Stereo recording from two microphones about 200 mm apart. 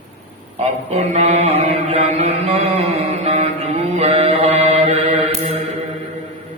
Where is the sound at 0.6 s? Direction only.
35° right (ahead or behind).